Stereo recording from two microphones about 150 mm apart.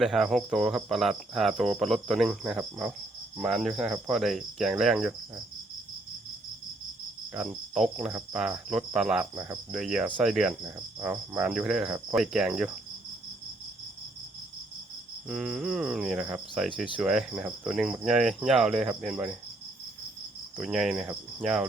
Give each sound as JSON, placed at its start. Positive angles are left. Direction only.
{"t": 0.0, "sound": "cricket", "side_deg": 0}
{"t": 7.3, "sound": "cricket", "side_deg": -5}
{"t": 9.3, "sound": "cricket", "side_deg": -20}
{"t": 9.7, "sound": "cricket", "side_deg": -5}
{"t": 15.3, "sound": "cricket", "side_deg": 0}
{"t": 20.6, "sound": "cricket", "side_deg": -5}